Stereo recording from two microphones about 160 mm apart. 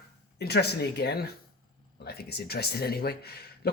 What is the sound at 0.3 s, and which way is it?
Speech, 90° left.